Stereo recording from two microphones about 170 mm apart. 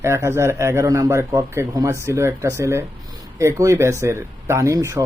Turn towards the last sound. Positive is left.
turn(degrees=-20)  # may be behind; listen again after turning